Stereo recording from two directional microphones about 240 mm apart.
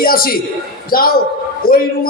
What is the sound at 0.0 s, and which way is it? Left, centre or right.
A man's voice, left.